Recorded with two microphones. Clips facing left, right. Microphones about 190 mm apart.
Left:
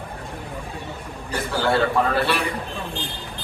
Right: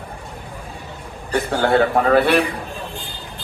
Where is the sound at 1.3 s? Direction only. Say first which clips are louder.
Right 5 dB; 60° right (ahead or behind).